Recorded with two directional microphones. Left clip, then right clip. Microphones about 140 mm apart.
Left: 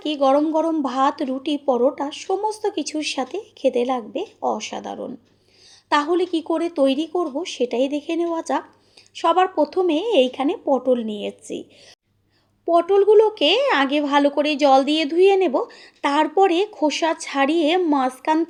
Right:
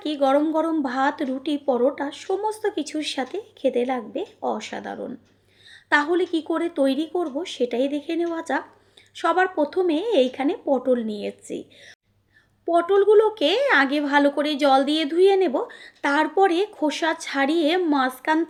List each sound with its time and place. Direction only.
0.0 s a woman's voice: 30° left (ahead or behind)
12.6 s a woman's voice: 25° left (ahead or behind)